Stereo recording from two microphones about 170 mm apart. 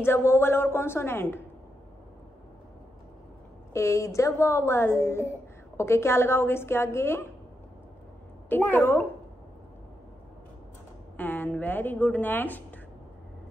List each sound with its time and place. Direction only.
0.0 s speech: 15° left (ahead or behind)
3.7 s speech: 15° left (ahead or behind)
8.5 s speech: 10° left (ahead or behind)
11.1 s speech: 10° left (ahead or behind)